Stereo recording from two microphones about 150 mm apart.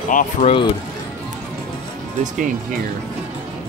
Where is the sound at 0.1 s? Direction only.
60° left (ahead or behind).